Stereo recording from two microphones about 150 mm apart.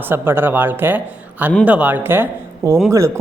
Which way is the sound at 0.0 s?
15° right (ahead or behind).